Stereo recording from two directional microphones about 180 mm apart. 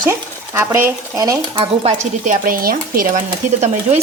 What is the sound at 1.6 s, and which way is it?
Speech, 35° right (ahead or behind).